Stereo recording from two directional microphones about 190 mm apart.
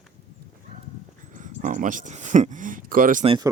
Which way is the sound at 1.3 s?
40° right (ahead or behind).